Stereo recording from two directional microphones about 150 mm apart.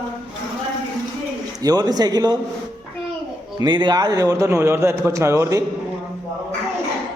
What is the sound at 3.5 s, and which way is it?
A man's voice, 30° right (ahead or behind).